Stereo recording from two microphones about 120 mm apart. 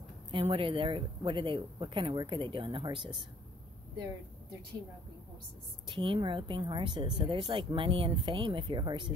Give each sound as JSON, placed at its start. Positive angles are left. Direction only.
{"t": 0.3, "sound": "speech", "side_deg": -50}
{"t": 5.9, "sound": "speech", "side_deg": -45}